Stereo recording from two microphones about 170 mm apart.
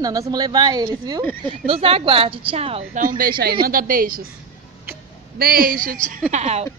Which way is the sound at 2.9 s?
55° right (ahead or behind).